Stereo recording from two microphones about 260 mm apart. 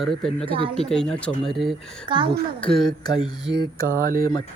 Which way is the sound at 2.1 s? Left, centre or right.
Centre.